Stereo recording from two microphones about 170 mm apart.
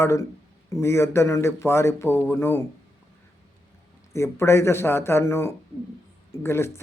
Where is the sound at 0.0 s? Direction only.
15° left (ahead or behind).